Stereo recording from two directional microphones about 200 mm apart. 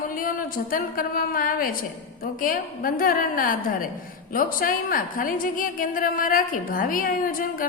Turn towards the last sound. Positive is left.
turn(degrees=45)  # may be behind; listen again after turning